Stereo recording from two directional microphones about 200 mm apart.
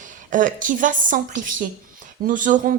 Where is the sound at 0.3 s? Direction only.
40° right (ahead or behind).